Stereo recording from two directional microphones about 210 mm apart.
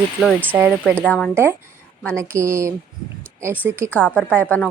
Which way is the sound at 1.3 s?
10° right (ahead or behind).